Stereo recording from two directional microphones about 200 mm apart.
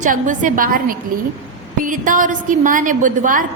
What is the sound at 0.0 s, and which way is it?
A woman's voice, 40° right (ahead or behind).